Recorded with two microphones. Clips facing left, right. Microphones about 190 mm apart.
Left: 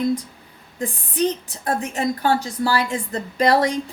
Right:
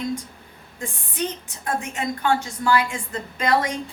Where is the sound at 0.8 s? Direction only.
35° left (ahead or behind).